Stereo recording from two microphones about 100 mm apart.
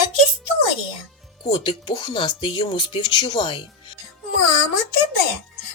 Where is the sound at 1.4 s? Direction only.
50° left (ahead or behind).